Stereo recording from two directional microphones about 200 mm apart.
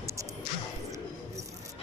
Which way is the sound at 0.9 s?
15° right (ahead or behind).